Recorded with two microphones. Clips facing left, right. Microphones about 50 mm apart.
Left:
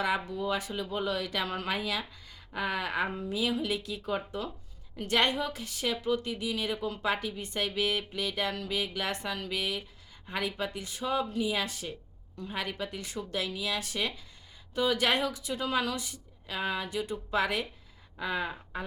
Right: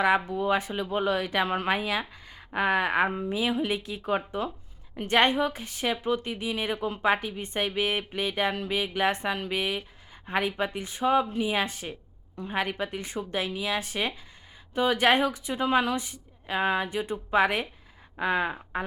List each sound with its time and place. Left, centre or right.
0.3 s speech: right